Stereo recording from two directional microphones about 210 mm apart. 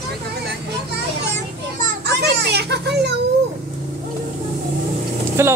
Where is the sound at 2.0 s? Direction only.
50° right (ahead or behind).